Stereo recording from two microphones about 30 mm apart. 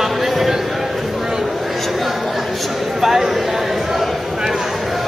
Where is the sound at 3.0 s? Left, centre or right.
Centre.